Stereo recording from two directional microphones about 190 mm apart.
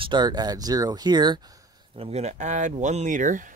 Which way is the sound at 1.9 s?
30° right (ahead or behind).